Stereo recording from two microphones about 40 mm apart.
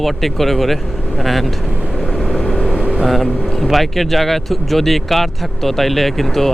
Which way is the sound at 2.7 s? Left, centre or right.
Right.